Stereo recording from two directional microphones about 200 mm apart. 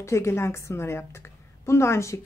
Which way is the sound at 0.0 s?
15° left (ahead or behind).